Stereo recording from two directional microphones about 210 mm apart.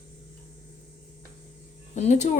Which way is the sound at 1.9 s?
35° left (ahead or behind).